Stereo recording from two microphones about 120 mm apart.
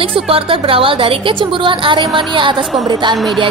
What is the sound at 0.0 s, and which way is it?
A woman's voice, 50° right (ahead or behind).